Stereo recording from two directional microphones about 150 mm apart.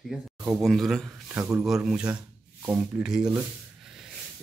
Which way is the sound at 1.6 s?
5° right (ahead or behind).